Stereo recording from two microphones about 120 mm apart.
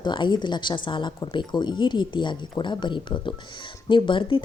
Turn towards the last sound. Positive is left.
turn(degrees=45)  # may be behind; listen again after turning